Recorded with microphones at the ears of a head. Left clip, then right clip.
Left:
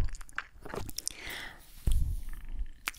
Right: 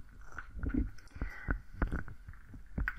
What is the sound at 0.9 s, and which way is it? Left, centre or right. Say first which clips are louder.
Chewing: left 9 dB; left.